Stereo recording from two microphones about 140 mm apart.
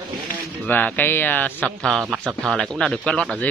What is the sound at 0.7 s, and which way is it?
Speech, 15° left (ahead or behind).